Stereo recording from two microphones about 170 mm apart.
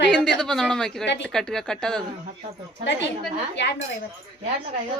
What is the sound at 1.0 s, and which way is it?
Speech, 90° left.